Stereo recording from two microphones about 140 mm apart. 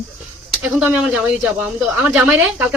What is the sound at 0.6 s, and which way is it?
Speech, 10° right (ahead or behind).